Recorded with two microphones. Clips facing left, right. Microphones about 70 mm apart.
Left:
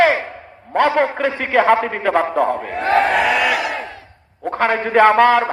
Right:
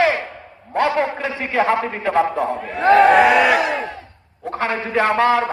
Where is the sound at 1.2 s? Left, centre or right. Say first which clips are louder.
Left 4 dB; left.